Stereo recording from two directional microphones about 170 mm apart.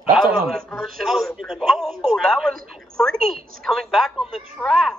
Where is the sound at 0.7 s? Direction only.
Centre (ahead or behind).